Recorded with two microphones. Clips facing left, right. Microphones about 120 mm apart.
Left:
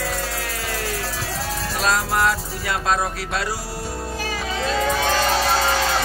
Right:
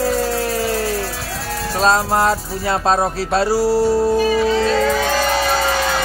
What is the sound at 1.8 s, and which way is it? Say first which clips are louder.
Music: right 5 dB; 30° right (ahead or behind).